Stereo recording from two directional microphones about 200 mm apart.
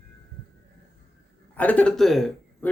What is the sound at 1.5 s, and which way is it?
Speech, 10° left (ahead or behind).